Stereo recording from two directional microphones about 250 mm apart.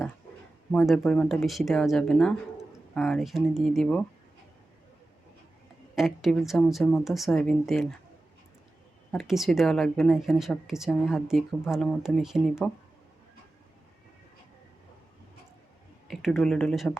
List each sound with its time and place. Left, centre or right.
0.7 s a woman's voice: centre
6.0 s a woman's voice: centre
9.1 s a woman's voice: centre
16.0 s a woman's voice: centre